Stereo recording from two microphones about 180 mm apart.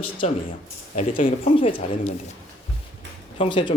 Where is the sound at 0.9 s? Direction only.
45° left (ahead or behind).